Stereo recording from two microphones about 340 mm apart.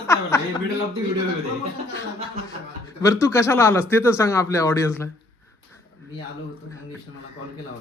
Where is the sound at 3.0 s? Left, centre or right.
Centre.